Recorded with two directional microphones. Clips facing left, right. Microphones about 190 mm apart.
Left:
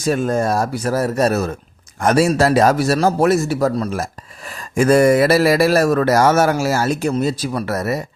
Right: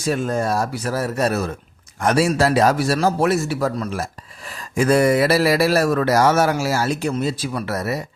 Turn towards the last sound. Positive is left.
turn(degrees=50)  # may be behind; listen again after turning